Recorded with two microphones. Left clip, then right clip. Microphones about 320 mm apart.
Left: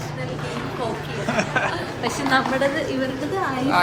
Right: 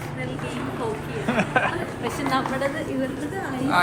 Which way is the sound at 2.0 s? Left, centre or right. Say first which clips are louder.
Left 5 dB; left.